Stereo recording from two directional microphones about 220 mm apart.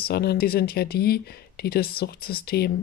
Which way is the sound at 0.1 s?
45° left (ahead or behind).